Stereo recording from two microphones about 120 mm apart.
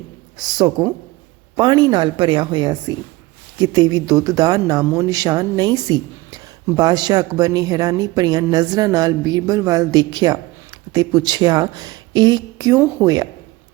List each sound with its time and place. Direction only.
0.3 s a woman's voice: 35° right (ahead or behind)